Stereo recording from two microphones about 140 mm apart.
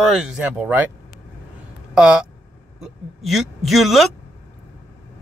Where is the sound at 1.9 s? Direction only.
5° right (ahead or behind).